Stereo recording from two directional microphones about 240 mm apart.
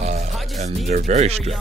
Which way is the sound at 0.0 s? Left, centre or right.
Right.